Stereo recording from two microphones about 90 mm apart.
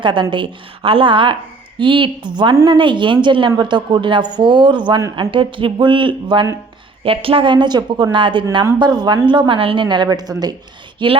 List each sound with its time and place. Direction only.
0.0 s a woman's voice: 65° right (ahead or behind)
5.1 s speech: 70° right (ahead or behind)
7.0 s a woman's voice: 90° right; by 8.4 s 65° right (ahead or behind)
8.8 s a woman's voice: 55° right (ahead or behind)
11.0 s a woman's voice: 65° right (ahead or behind)